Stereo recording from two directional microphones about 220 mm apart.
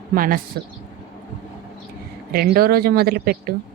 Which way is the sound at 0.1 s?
40° right (ahead or behind).